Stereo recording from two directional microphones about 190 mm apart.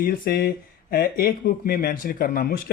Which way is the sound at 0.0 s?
50° left (ahead or behind).